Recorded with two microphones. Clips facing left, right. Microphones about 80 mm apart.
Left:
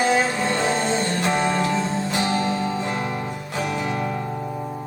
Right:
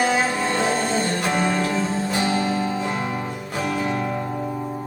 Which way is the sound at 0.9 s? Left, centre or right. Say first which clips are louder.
Right 1 dB; centre.